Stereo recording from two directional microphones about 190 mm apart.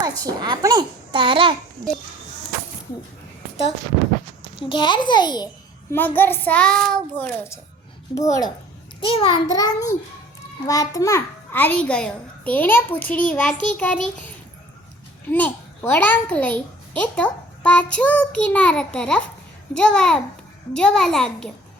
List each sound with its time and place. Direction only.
0.0 s a child's voice: 20° right (ahead or behind)
4.5 s a child's voice: 25° left (ahead or behind)
5.9 s a child's voice: 10° left (ahead or behind)
9.0 s a child's voice: 30° left (ahead or behind); by 21.5 s 5° left (ahead or behind)